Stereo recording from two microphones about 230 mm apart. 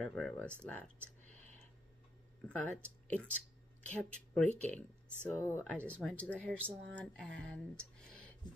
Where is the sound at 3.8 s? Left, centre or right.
Centre.